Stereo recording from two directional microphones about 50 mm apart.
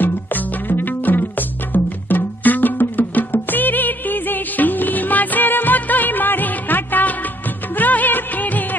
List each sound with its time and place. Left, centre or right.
0.0 s music: left
7.7 s music of bollywood: left